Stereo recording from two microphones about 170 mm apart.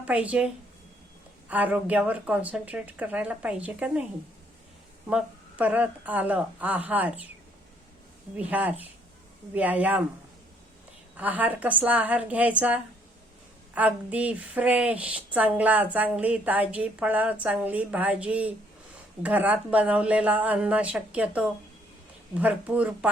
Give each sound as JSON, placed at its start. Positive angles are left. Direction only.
{"t": 0.0, "sound": "a woman's voice", "side_deg": -10}
{"t": 5.0, "sound": "a woman's voice", "side_deg": -5}
{"t": 8.4, "sound": "a woman's voice", "side_deg": -10}
{"t": 11.2, "sound": "a woman's voice", "side_deg": -10}